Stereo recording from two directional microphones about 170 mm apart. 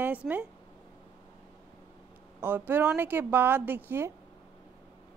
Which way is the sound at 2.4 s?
10° right (ahead or behind).